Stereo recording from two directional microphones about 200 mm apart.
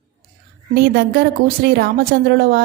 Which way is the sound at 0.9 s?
55° right (ahead or behind).